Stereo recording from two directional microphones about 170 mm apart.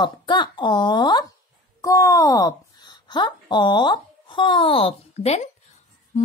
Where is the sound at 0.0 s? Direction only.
25° left (ahead or behind).